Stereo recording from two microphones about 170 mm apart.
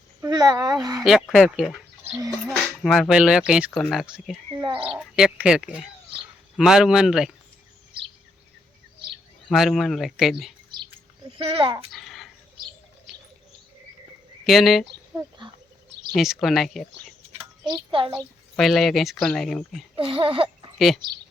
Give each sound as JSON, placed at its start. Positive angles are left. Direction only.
{"t": 0.2, "sound": "speech", "side_deg": -20}
{"t": 1.0, "sound": "speech", "side_deg": 0}
{"t": 4.6, "sound": "speech", "side_deg": -30}
{"t": 4.9, "sound": "speech", "side_deg": -5}
{"t": 9.5, "sound": "speech", "side_deg": 0}
{"t": 11.3, "sound": "speech", "side_deg": -35}
{"t": 11.9, "sound": "a sound", "side_deg": 0}
{"t": 14.4, "sound": "speech", "side_deg": 0}
{"t": 16.1, "sound": "speech", "side_deg": 0}
{"t": 17.7, "sound": "speech", "side_deg": -30}
{"t": 18.2, "sound": "speech", "side_deg": 0}
{"t": 20.0, "sound": "speech", "side_deg": -30}
{"t": 20.7, "sound": "speech", "side_deg": 0}